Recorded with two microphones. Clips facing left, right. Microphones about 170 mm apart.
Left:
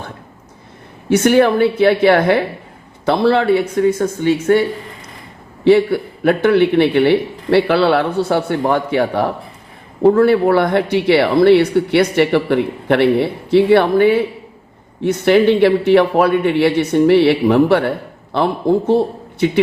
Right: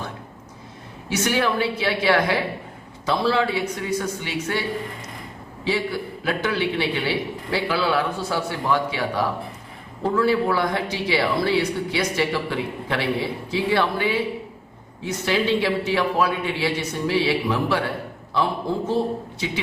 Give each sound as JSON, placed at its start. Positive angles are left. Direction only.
{"t": 1.1, "sound": "speech", "side_deg": 55}
{"t": 5.6, "sound": "speech", "side_deg": 60}